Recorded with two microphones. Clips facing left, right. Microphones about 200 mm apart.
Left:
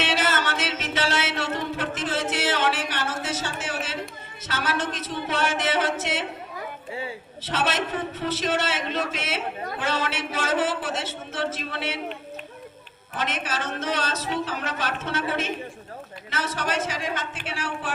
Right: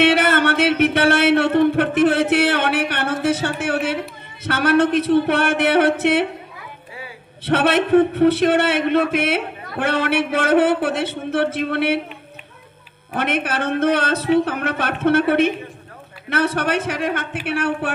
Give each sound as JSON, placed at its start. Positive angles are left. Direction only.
{"t": 0.0, "sound": "a sound", "side_deg": -60}
{"t": 4.4, "sound": "a man's voice", "side_deg": -60}
{"t": 7.4, "sound": "a man's voice", "side_deg": -60}
{"t": 13.1, "sound": "a man's voice", "side_deg": -60}